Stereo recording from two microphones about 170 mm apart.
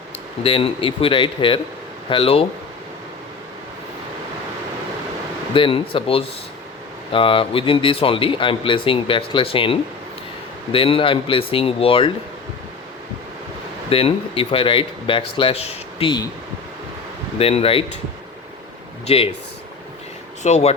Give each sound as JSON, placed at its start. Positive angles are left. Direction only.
{"t": 0.4, "sound": "speech", "side_deg": 30}
{"t": 5.5, "sound": "speech", "side_deg": 30}
{"t": 13.9, "sound": "speech", "side_deg": 35}
{"t": 17.3, "sound": "speech", "side_deg": 35}
{"t": 19.0, "sound": "speech", "side_deg": 35}
{"t": 20.4, "sound": "speech", "side_deg": 40}